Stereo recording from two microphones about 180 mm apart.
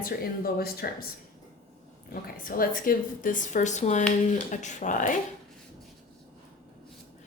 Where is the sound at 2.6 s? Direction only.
50° left (ahead or behind).